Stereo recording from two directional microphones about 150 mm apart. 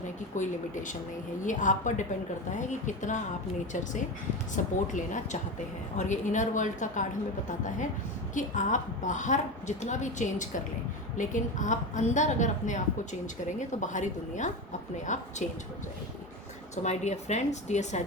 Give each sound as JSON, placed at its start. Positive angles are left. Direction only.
{"t": 0.3, "sound": "a woman's voice", "side_deg": 55}
{"t": 4.5, "sound": "a woman's voice", "side_deg": 55}
{"t": 8.4, "sound": "a woman's voice", "side_deg": 55}
{"t": 16.7, "sound": "a woman's voice", "side_deg": 50}